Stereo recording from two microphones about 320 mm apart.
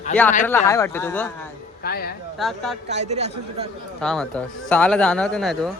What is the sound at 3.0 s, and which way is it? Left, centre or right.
Speech, centre.